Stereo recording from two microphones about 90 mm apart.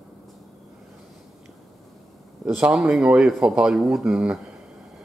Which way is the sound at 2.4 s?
5° right (ahead or behind).